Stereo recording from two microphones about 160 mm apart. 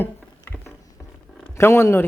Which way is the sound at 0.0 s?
10° left (ahead or behind).